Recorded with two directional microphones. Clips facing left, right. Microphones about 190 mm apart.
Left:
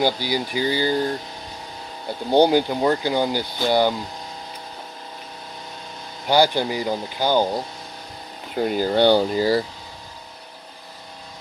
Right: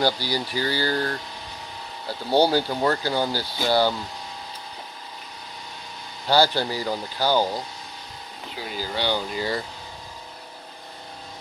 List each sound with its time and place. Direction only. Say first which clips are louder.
0.0 s speech: left 2 dB; 15° left (ahead or behind)
6.2 s speech: left 2 dB; 15° left (ahead or behind)
8.5 s speech: left 11 dB; 50° left (ahead or behind); by 9.7 s 35° left (ahead or behind)